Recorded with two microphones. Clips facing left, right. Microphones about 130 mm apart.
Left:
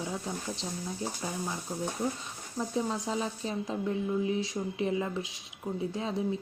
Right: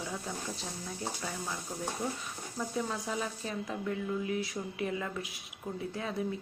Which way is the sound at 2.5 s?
20° left (ahead or behind).